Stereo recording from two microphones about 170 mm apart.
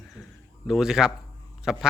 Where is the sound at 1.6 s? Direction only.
5° right (ahead or behind).